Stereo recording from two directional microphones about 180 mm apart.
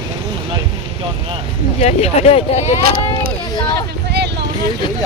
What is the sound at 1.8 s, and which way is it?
Speech, 35° left (ahead or behind).